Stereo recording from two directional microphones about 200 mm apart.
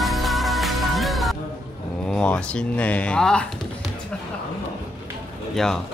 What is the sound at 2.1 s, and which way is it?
Speech, 5° left (ahead or behind).